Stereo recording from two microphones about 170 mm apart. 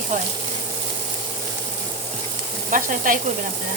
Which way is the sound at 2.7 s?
50° right (ahead or behind).